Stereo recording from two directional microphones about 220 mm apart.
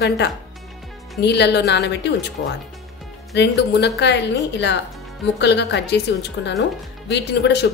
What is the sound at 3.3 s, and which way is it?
A woman's voice, 50° left (ahead or behind).